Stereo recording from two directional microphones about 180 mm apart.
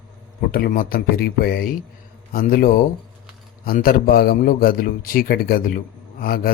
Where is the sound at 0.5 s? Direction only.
50° left (ahead or behind).